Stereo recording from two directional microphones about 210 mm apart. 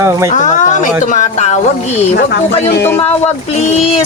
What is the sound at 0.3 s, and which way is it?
Speech, 35° left (ahead or behind).